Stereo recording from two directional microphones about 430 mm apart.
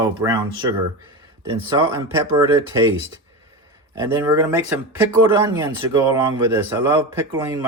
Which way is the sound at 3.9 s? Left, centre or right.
Centre.